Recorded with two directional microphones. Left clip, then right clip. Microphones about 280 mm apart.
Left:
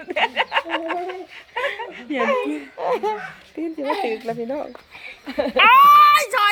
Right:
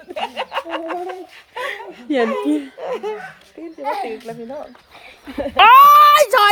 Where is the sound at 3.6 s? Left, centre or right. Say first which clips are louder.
Left 6 dB; left.